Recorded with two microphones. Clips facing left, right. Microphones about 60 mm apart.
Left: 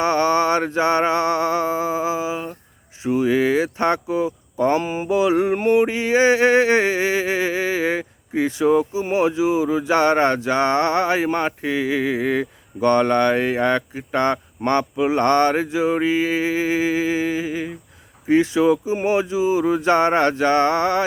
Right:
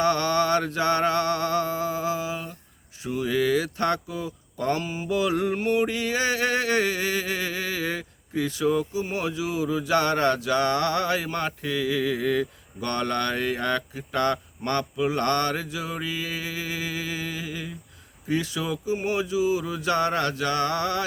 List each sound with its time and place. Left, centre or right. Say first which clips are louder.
0.0 s mantra: left 5 dB; left